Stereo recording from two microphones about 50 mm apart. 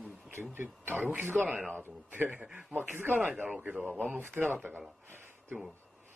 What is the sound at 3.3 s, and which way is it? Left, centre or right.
Speech, right.